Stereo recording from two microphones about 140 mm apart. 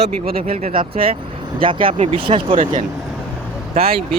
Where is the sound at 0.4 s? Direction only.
55° right (ahead or behind).